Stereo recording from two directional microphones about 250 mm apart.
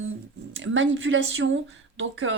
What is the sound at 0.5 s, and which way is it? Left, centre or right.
Speech, right.